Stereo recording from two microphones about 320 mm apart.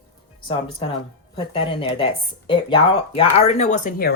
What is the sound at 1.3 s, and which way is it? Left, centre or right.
Speech, centre.